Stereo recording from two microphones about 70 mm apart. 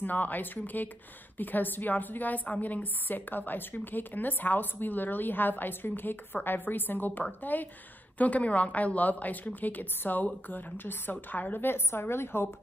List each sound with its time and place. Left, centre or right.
0.0 s a woman's voice: left